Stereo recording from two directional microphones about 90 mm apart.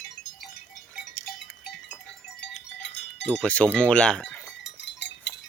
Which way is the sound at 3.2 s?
10° left (ahead or behind).